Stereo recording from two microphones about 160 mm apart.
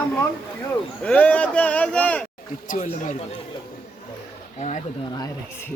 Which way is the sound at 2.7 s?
55° left (ahead or behind).